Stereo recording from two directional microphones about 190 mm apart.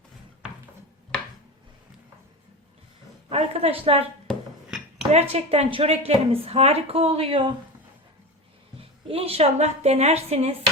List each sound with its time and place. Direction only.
3.2 s a woman's voice: 30° right (ahead or behind)
4.3 s a sound: centre (ahead or behind)
5.1 s a woman's voice: 30° right (ahead or behind)
8.8 s a woman's voice: 30° right (ahead or behind)